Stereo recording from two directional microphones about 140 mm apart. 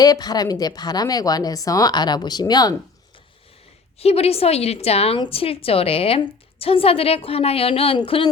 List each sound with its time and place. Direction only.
0.0 s a woman's voice: 30° left (ahead or behind)
4.0 s a woman's voice: 45° left (ahead or behind)